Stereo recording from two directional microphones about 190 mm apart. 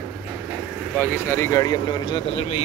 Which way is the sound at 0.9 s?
10° left (ahead or behind).